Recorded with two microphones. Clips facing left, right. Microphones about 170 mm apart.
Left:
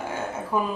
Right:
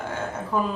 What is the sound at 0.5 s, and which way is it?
Speech, 10° left (ahead or behind).